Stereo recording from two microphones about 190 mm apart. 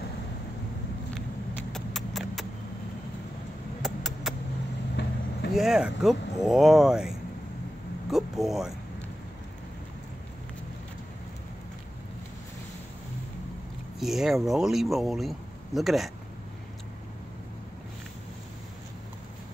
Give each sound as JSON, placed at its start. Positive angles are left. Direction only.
{"t": 1.7, "sound": "horse", "side_deg": 0}
{"t": 3.8, "sound": "a sound", "side_deg": 0}
{"t": 5.0, "sound": "vehicle", "side_deg": 65}
{"t": 5.5, "sound": "speech", "side_deg": 0}
{"t": 13.9, "sound": "speech", "side_deg": 0}